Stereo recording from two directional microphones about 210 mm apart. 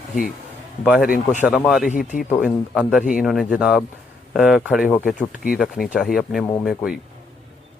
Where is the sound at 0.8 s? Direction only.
5° right (ahead or behind).